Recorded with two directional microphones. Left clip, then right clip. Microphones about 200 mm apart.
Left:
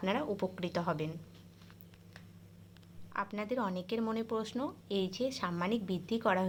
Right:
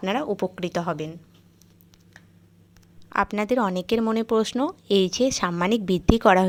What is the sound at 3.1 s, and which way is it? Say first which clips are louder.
Speech: right 14 dB; 50° right (ahead or behind).